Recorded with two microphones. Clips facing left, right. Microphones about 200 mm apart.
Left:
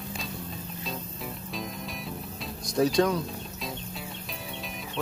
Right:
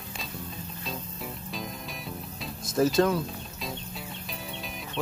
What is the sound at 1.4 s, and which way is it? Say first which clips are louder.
Music: left 1 dB; centre (ahead or behind).